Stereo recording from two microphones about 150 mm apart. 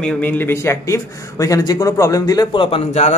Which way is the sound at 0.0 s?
10° left (ahead or behind).